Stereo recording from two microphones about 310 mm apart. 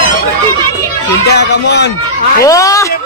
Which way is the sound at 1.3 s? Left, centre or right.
Left.